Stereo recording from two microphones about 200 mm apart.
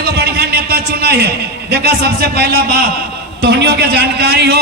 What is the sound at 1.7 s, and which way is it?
A man's voice, 55° right (ahead or behind).